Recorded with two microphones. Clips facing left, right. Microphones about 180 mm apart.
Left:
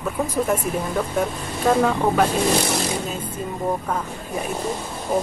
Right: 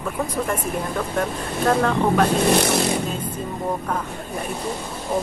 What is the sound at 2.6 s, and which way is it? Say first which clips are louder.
Speech: right 3 dB; 65° right (ahead or behind).